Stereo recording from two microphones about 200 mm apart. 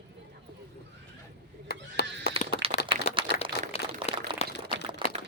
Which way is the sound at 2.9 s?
25° right (ahead or behind).